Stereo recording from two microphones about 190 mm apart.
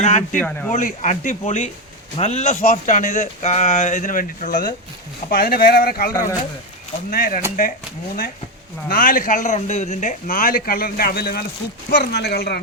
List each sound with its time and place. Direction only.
0.0 s speech: 35° left (ahead or behind)
0.3 s speech: 10° left (ahead or behind)
0.7 s speech: 40° left (ahead or behind)
7.1 s speech: 45° left (ahead or behind)
8.9 s speech: 50° left (ahead or behind)